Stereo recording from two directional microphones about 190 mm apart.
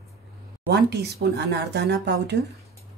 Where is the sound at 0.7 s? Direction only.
60° right (ahead or behind).